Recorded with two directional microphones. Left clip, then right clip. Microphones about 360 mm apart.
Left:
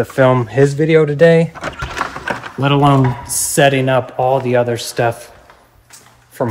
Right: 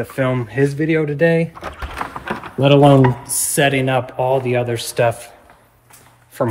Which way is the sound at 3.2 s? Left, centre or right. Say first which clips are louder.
Left 4 dB; centre.